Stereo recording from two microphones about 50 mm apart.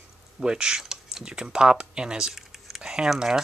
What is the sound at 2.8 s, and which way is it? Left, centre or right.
Speech, centre.